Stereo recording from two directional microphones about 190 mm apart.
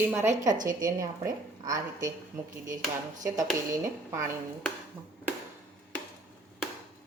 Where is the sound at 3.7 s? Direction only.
15° right (ahead or behind).